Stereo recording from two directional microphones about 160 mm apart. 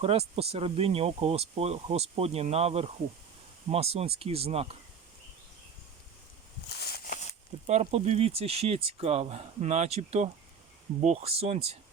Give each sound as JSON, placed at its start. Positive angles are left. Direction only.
{"t": 0.0, "sound": "speech", "side_deg": -40}
{"t": 6.7, "sound": "a sound", "side_deg": 85}
{"t": 7.7, "sound": "speech", "side_deg": -40}